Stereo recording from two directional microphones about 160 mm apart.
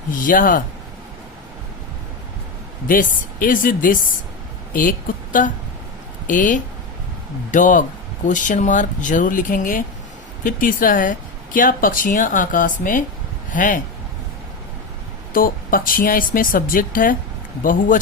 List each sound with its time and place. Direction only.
0.2 s speech: 55° left (ahead or behind)
2.8 s a woman's voice: 55° left (ahead or behind)
15.3 s speech: 60° left (ahead or behind)